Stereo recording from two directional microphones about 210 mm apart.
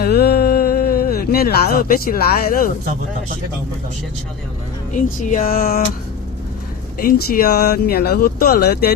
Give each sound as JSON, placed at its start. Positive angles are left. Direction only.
{"t": 0.0, "sound": "speech", "side_deg": 50}
{"t": 5.3, "sound": "a sound", "side_deg": 35}
{"t": 7.0, "sound": "speech", "side_deg": 45}